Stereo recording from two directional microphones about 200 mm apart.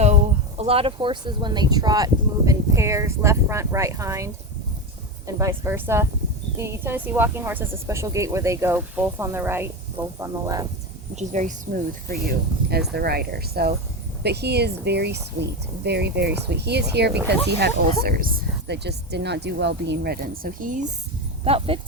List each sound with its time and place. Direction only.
0.0 s speech: 35° right (ahead or behind); by 10.7 s 15° right (ahead or behind)
11.1 s speech: 35° right (ahead or behind)
12.9 s speech: 50° right (ahead or behind)
21.4 s speech: 30° right (ahead or behind)